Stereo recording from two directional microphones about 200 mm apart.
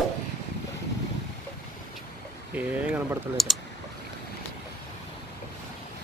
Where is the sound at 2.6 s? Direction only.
5° right (ahead or behind).